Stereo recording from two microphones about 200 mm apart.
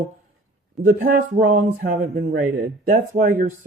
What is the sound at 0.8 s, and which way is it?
Speech, 45° right (ahead or behind).